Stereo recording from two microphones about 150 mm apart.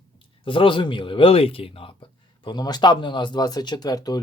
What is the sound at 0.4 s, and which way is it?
A man's voice, 35° left (ahead or behind).